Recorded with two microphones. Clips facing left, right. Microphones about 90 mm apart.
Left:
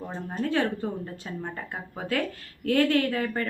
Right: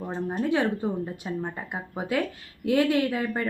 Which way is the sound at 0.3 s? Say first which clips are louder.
Right 1 dB; 15° right (ahead or behind).